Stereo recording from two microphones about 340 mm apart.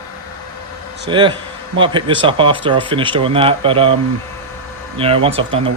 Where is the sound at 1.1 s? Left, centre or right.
Centre.